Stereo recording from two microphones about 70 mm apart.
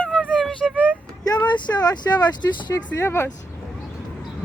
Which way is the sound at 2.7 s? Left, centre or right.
Left.